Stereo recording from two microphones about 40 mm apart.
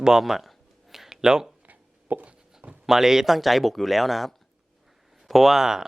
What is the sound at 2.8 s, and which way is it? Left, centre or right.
Speech, centre.